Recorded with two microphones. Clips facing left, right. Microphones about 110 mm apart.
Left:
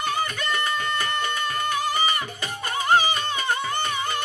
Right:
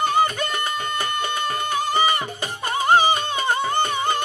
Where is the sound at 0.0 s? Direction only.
25° right (ahead or behind).